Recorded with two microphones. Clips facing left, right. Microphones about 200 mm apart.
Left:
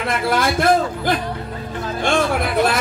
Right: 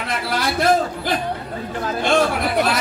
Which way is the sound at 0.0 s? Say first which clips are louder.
Left 4 dB; 50° left (ahead or behind).